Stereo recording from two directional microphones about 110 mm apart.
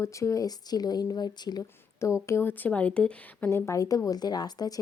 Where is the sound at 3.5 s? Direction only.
25° left (ahead or behind).